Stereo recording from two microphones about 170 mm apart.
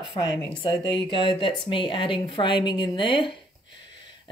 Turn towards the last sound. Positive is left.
turn(degrees=30)  # may be behind; listen again after turning